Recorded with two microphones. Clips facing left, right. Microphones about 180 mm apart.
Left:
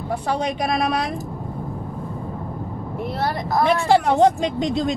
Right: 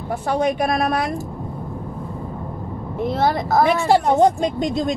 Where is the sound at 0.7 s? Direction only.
Centre (ahead or behind).